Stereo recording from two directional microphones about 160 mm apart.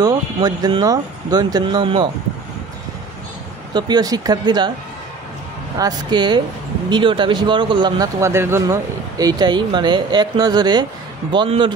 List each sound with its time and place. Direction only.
0.0 s speech: 25° right (ahead or behind)
3.7 s speech: 25° right (ahead or behind)
5.8 s speech: 25° right (ahead or behind)
8.2 s speech: 15° right (ahead or behind); by 11.7 s 30° right (ahead or behind)